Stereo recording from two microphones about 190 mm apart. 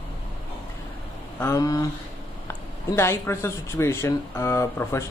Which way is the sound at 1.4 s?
15° left (ahead or behind).